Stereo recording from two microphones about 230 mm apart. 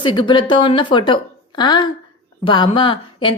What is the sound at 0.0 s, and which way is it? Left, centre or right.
A woman's voice, left.